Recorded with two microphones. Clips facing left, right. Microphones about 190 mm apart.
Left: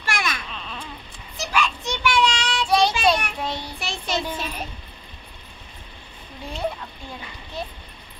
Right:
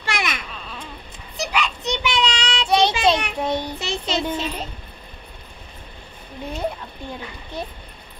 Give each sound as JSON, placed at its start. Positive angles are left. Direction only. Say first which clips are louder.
{"t": 0.0, "sound": "babbling", "louder": "right 1 dB", "side_deg": -20}
{"t": 1.3, "sound": "a sound", "louder": "even", "side_deg": -20}
{"t": 1.9, "sound": "child singing", "louder": "left 2 dB", "side_deg": -20}